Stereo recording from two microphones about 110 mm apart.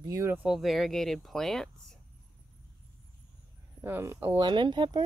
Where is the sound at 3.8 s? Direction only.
20° right (ahead or behind).